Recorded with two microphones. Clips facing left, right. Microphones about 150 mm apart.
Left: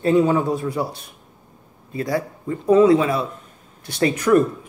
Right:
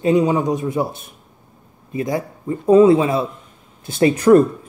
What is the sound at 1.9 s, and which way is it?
Speech, 20° right (ahead or behind).